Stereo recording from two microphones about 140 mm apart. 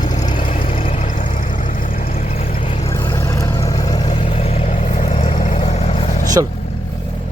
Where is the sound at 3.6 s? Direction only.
25° left (ahead or behind); by 6.1 s 45° left (ahead or behind).